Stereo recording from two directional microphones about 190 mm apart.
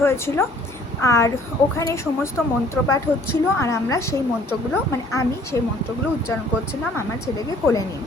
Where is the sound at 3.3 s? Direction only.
15° left (ahead or behind).